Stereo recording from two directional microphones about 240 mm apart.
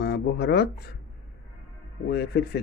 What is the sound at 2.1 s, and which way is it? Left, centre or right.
Speech, left.